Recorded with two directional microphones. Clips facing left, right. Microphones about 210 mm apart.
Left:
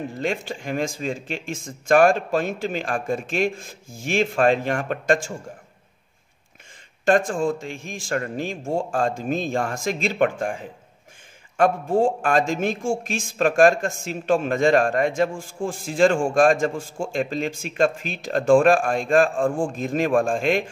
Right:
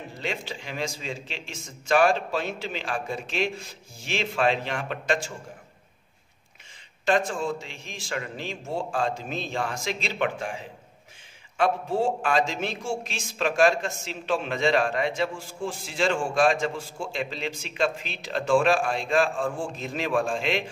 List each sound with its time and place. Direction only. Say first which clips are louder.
0.2 s speech: left 5 dB; 50° left (ahead or behind)
7.1 s speech: left 5 dB; 50° left (ahead or behind)